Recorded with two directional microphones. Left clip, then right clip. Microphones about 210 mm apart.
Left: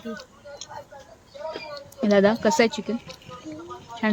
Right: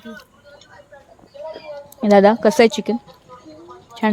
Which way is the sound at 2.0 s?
25° right (ahead or behind).